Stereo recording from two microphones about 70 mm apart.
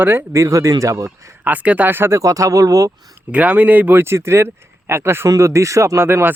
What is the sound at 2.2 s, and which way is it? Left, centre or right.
Speech, right.